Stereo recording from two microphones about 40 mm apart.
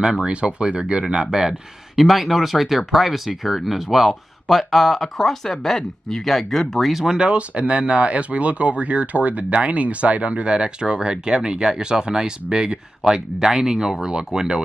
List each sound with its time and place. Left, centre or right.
0.0 s speech: right
2.0 s speech: centre
6.9 s speech: centre
7.2 s speech: right